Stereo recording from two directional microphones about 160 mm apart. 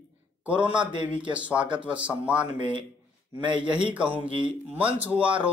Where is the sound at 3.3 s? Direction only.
30° right (ahead or behind).